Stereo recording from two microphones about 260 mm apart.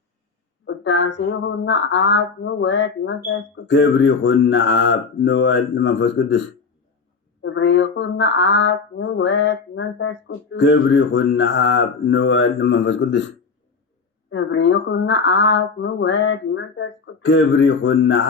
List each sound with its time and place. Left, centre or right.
0.6 s a sound: left
1.2 s speech: left
7.4 s speech: left